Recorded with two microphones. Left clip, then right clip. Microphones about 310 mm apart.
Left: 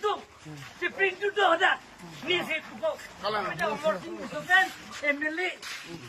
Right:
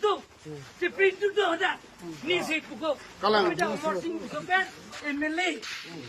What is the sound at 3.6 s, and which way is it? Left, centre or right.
Speech, centre.